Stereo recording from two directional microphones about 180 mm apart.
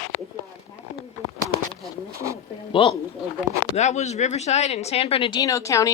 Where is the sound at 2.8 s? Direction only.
30° left (ahead or behind).